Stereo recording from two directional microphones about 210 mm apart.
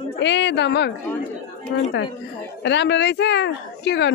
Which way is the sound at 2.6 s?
55° left (ahead or behind).